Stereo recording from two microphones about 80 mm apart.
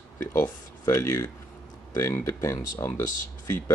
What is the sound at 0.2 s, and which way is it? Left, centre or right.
Speech, left.